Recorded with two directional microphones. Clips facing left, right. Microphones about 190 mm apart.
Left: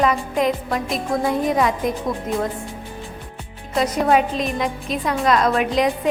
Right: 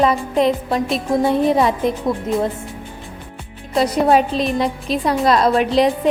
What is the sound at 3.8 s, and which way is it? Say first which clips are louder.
Speech: right 3 dB; 35° right (ahead or behind).